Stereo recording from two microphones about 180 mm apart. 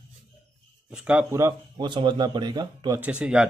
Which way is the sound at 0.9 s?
10° right (ahead or behind).